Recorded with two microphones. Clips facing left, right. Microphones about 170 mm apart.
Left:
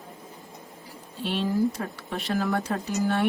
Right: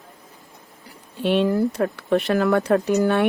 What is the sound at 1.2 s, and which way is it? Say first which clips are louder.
Speech: right 6 dB; 70° right (ahead or behind).